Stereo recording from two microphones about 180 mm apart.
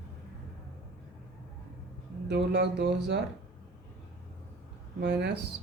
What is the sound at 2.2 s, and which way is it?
Speech, 70° right (ahead or behind).